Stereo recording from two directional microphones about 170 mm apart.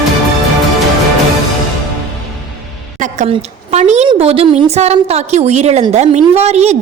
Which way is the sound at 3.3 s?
40° right (ahead or behind).